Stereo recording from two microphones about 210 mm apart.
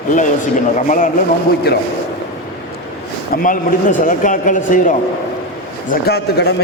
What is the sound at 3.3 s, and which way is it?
A man's voice, 40° left (ahead or behind).